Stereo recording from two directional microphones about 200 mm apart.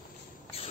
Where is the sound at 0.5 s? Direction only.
30° left (ahead or behind).